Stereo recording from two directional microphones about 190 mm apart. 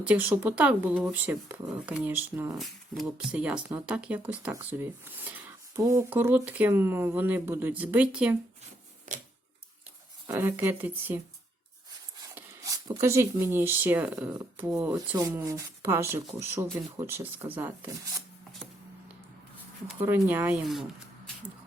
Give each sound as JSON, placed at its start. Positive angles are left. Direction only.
{"t": 0.0, "sound": "speech", "side_deg": -5}
{"t": 9.1, "sound": "scissors", "side_deg": -40}
{"t": 10.2, "sound": "speech", "side_deg": -15}
{"t": 12.3, "sound": "speech", "side_deg": -15}
{"t": 20.0, "sound": "speech", "side_deg": -10}